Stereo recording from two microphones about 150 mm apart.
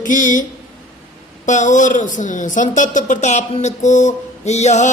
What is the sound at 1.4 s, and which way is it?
A man's voice, 55° left (ahead or behind).